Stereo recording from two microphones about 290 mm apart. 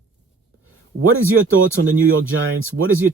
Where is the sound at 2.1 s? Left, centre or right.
Right.